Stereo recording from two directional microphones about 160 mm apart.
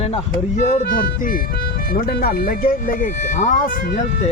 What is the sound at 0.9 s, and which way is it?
Speech, 60° left (ahead or behind).